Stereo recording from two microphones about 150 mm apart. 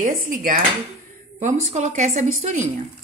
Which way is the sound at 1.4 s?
55° right (ahead or behind).